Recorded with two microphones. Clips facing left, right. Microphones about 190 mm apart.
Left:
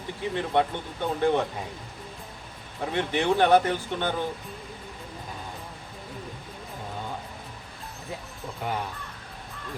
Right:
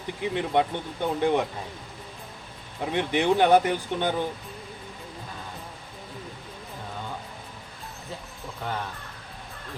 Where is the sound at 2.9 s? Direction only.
15° right (ahead or behind).